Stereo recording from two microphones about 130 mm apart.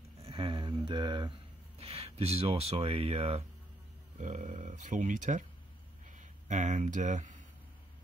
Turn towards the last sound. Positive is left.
turn(degrees=-75)  # may be behind; listen again after turning